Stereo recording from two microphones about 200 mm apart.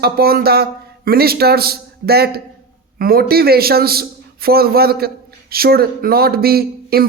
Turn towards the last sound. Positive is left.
turn(degrees=-50)  # may be behind; listen again after turning